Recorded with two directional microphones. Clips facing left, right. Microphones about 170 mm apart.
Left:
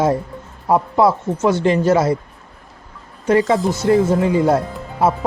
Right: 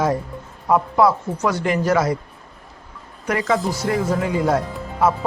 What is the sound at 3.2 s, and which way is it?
Speech, 30° left (ahead or behind).